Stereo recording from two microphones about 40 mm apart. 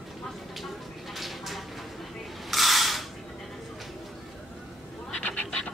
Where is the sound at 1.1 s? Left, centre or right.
Centre.